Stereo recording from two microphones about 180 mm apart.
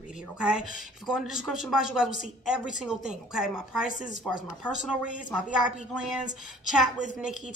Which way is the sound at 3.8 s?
45° left (ahead or behind).